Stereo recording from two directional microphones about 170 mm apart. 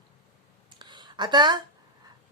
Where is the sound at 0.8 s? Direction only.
25° right (ahead or behind).